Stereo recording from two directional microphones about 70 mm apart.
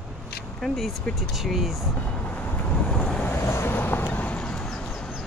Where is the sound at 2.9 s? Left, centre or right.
Centre.